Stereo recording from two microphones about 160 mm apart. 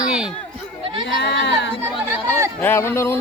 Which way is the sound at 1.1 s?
90° left.